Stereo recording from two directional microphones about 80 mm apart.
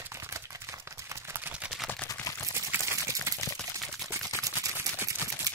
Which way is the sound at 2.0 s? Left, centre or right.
Left.